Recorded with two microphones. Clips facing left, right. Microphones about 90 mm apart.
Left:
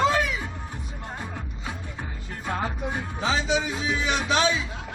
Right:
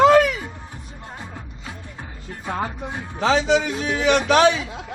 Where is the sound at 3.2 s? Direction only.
85° right; by 4.7 s 70° right (ahead or behind).